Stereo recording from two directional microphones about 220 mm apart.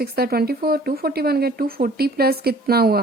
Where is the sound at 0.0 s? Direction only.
45° right (ahead or behind).